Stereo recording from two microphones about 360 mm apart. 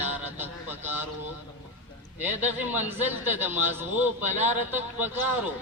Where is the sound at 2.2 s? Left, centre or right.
Centre.